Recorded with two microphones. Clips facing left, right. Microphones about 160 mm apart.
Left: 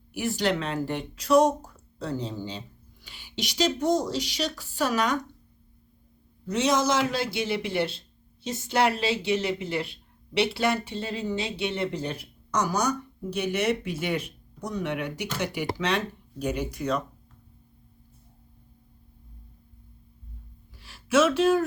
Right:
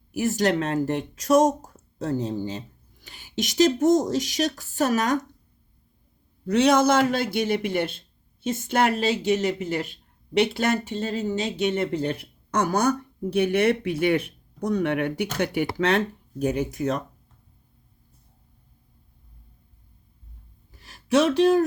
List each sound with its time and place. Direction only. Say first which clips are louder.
0.1 s speech: right 4 dB; 40° right (ahead or behind)
6.5 s speech: right 5 dB; 60° right (ahead or behind)
20.8 s a sound: right 1 dB; 40° right (ahead or behind)